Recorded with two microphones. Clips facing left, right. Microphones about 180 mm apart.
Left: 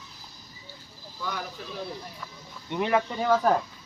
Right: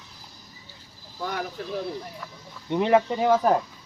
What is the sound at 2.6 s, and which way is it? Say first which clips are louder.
Speech: right 5 dB; 30° right (ahead or behind).